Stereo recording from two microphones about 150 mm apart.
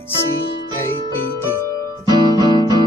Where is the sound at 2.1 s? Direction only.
25° right (ahead or behind).